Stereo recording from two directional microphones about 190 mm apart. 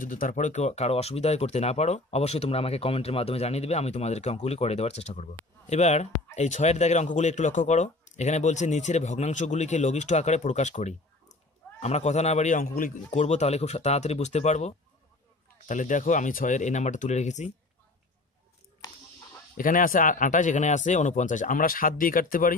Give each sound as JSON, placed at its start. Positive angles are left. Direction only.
{"t": 0.0, "sound": "speech", "side_deg": 45}
{"t": 15.7, "sound": "speech", "side_deg": 40}
{"t": 19.5, "sound": "speech", "side_deg": 45}